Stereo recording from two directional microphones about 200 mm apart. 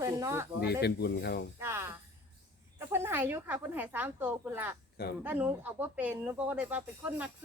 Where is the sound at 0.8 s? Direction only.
55° left (ahead or behind).